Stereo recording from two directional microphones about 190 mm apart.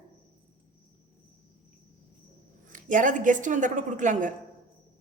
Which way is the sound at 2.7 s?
45° right (ahead or behind).